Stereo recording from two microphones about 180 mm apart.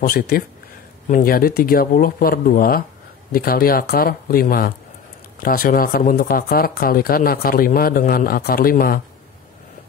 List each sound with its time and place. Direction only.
0.0 s speech: 55° left (ahead or behind)